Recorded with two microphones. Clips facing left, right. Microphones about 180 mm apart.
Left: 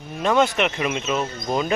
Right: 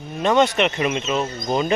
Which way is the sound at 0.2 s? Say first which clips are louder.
Right 2 dB; centre (ahead or behind).